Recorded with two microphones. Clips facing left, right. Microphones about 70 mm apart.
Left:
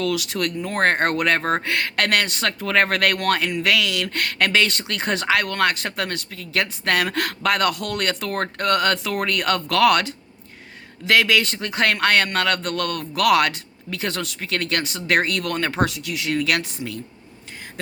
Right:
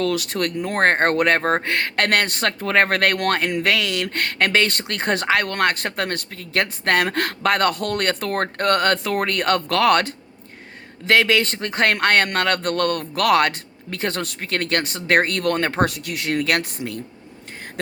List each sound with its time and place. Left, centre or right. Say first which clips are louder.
0.0 s speech: right 1 dB; right